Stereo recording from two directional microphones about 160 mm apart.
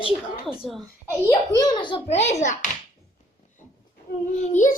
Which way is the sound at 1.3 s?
25° left (ahead or behind).